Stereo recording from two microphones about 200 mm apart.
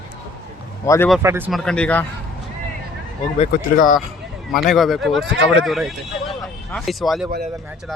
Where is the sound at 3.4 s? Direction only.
40° left (ahead or behind).